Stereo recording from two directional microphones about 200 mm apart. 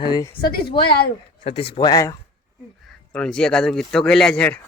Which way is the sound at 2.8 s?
5° left (ahead or behind).